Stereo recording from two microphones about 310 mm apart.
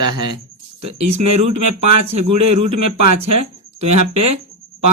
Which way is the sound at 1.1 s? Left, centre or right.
Right.